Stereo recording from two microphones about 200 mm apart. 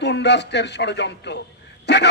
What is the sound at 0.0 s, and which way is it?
Speech, 60° left (ahead or behind).